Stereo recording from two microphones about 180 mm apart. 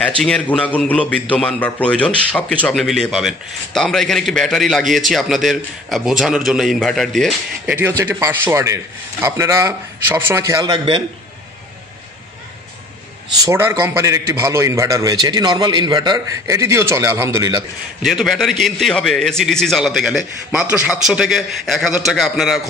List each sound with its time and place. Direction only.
0.2 s a man's voice: 5° left (ahead or behind)
8.0 s a man's voice: 15° right (ahead or behind)
13.5 s a man's voice: 15° right (ahead or behind)
18.0 s a man's voice: centre (ahead or behind)